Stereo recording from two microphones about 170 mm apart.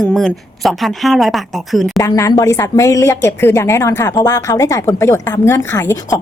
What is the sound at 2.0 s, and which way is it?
Speech, 20° left (ahead or behind).